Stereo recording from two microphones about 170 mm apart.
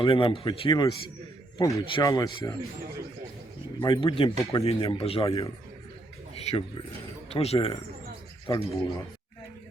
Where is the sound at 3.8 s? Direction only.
30° left (ahead or behind).